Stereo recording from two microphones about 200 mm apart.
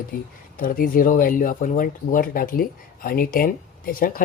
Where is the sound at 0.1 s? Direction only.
45° left (ahead or behind).